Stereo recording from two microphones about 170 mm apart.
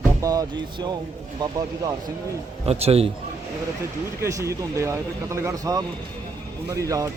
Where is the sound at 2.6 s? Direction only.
35° right (ahead or behind).